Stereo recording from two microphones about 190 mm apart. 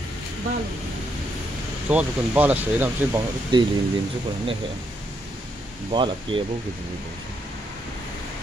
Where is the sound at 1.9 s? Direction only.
5° right (ahead or behind).